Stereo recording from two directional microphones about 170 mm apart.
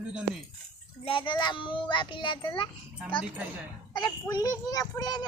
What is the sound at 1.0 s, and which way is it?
A child's voice, 30° left (ahead or behind).